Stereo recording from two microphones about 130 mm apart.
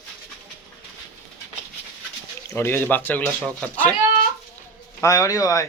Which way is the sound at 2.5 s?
15° left (ahead or behind).